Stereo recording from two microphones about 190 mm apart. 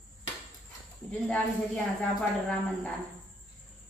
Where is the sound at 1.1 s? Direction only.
10° left (ahead or behind).